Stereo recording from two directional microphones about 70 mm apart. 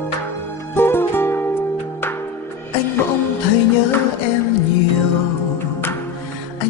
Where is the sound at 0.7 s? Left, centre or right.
Left.